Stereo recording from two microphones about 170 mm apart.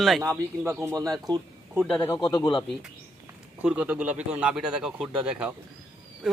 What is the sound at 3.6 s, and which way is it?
A man's voice, 10° right (ahead or behind).